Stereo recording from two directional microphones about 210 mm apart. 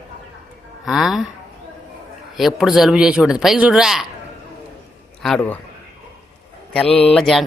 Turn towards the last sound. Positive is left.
turn(degrees=0)  # may be behind; listen again after turning